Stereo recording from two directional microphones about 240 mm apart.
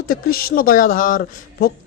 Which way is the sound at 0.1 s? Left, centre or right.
Left.